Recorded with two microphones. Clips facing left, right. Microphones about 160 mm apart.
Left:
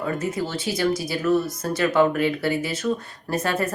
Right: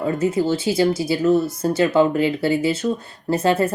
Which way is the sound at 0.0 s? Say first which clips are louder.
Right 6 dB; 30° right (ahead or behind).